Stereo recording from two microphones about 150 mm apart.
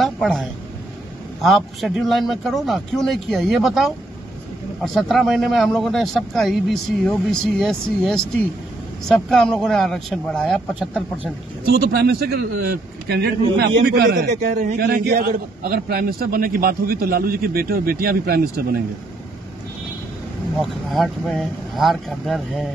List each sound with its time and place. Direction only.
0.0 s a sound: centre (ahead or behind)
1.4 s speech: centre (ahead or behind)
11.6 s a man's voice: 90° right
14.4 s a man's voice: 70° right (ahead or behind); by 18.8 s 90° right
20.6 s speech: centre (ahead or behind)